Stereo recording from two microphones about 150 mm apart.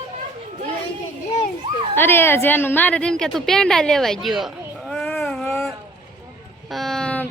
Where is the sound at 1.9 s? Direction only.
15° left (ahead or behind).